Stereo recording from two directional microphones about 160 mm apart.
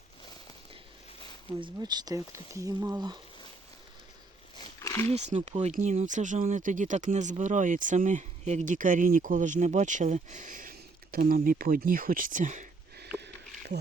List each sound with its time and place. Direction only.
1.6 s speech: 25° right (ahead or behind)
4.5 s roaring cats: 25° left (ahead or behind)
5.1 s speech: 45° right (ahead or behind)
13.1 s a sound: 90° right